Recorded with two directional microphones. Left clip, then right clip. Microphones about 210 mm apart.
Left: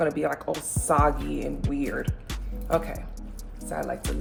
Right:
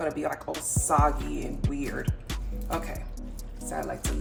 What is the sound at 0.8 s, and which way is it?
Speech, 5° right (ahead or behind).